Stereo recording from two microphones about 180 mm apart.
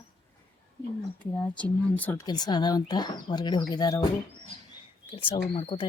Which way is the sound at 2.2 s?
20° left (ahead or behind).